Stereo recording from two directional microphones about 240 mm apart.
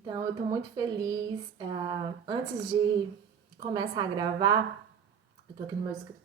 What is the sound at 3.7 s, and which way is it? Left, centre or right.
Speech, centre.